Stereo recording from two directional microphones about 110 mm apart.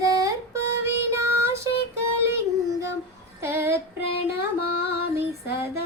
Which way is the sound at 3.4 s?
20° right (ahead or behind).